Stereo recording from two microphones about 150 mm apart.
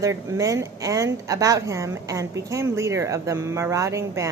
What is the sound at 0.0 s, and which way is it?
Speech, 20° right (ahead or behind).